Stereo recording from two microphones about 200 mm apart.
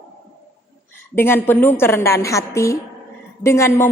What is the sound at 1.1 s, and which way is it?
A woman's voice, 10° left (ahead or behind).